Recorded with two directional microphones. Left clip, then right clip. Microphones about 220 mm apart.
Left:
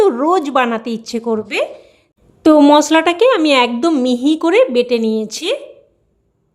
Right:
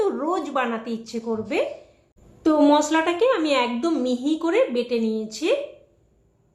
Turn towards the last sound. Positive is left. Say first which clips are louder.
# left 5 dB
turn(degrees=50)  # may be behind; listen again after turning